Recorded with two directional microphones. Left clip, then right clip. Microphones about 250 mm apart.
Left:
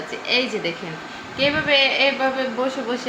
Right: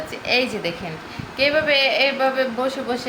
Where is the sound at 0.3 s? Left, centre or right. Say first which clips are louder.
Right 1 dB; right.